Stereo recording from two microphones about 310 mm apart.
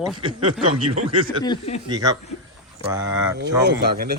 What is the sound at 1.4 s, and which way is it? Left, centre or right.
Speech, centre.